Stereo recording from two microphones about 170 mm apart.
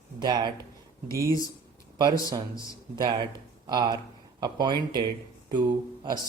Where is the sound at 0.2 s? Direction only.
25° right (ahead or behind).